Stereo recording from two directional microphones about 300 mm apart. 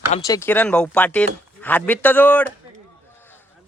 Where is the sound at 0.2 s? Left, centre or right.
Centre.